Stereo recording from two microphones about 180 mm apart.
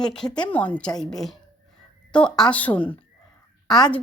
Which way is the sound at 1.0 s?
Centre (ahead or behind).